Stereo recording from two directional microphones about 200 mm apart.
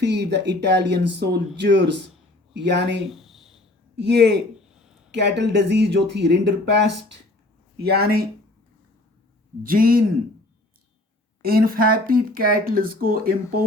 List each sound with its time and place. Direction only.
0.0 s speech: 60° right (ahead or behind)
3.1 s a sound: centre (ahead or behind)
3.9 s speech: 60° right (ahead or behind)
4.7 s a sound: 5° right (ahead or behind)
5.1 s speech: 55° right (ahead or behind)
7.8 s speech: 50° right (ahead or behind)
9.6 s speech: 45° right (ahead or behind)
11.4 s speech: 45° right (ahead or behind)